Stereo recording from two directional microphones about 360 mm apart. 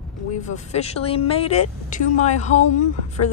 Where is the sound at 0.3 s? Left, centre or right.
Centre.